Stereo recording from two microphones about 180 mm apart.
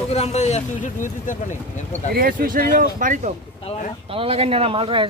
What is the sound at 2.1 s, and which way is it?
Speech, 55° right (ahead or behind).